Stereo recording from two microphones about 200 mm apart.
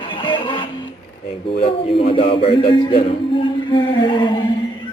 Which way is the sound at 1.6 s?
30° left (ahead or behind).